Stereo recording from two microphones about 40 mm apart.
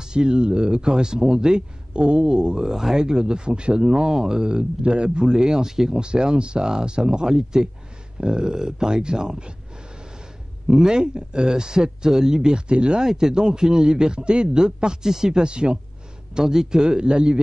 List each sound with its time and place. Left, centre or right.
0.0 s a man's voice: centre
2.7 s speech: centre
10.7 s speech: centre
13.0 s a man's voice: centre